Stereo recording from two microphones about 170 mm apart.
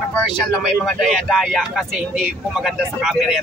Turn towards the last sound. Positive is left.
turn(degrees=0)  # may be behind; listen again after turning